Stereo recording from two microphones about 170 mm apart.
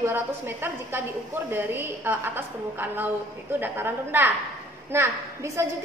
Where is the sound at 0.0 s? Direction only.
10° right (ahead or behind).